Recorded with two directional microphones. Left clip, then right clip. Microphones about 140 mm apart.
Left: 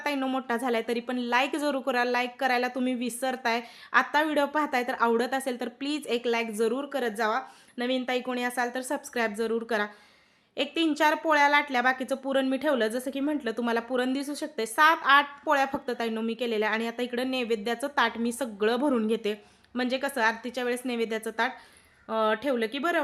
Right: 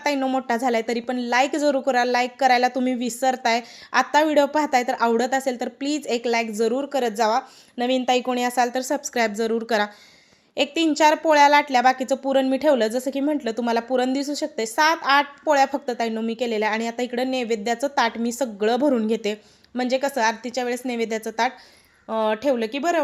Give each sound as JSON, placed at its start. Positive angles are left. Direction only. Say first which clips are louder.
{"t": 0.0, "sound": "a woman's voice", "louder": "right 7 dB", "side_deg": -20}